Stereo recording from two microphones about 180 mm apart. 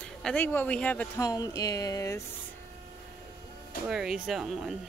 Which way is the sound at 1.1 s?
20° left (ahead or behind).